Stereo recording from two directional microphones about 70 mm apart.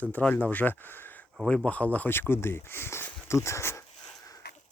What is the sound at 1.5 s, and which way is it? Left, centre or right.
Speech, centre.